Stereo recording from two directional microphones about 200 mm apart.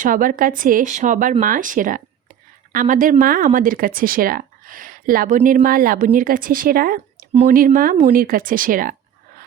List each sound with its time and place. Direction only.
0.0 s speech: 45° right (ahead or behind)